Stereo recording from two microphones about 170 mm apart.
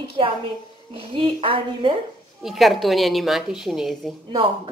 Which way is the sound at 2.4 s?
Centre (ahead or behind).